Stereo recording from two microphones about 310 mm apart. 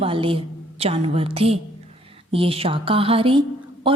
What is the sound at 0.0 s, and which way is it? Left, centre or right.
A woman's voice, centre.